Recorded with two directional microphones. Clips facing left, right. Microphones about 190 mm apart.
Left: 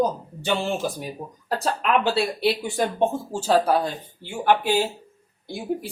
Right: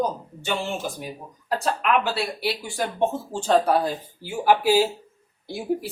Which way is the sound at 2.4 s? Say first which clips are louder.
Left 5 dB; 20° left (ahead or behind).